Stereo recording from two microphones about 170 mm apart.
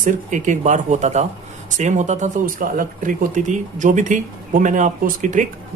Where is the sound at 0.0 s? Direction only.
45° right (ahead or behind).